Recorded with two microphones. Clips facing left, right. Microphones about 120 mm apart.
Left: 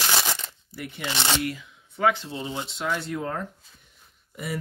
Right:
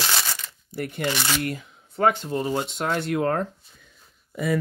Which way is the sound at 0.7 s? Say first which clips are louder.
Right 7 dB; 50° right (ahead or behind).